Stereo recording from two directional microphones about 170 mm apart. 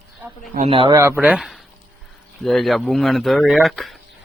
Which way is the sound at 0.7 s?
30° right (ahead or behind).